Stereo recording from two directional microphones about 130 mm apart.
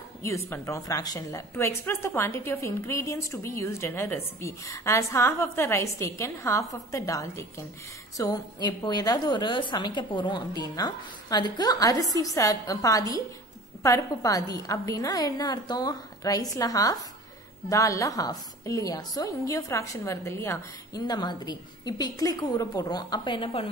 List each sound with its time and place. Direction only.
0.2 s a woman's voice: 20° left (ahead or behind)
21.0 s a woman's voice: 30° left (ahead or behind)